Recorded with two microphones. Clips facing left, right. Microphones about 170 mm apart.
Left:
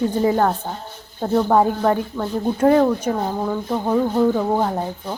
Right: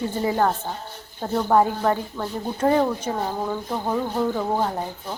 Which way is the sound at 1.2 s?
5° left (ahead or behind).